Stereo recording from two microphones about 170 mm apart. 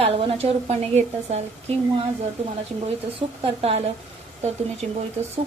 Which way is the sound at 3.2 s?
35° right (ahead or behind).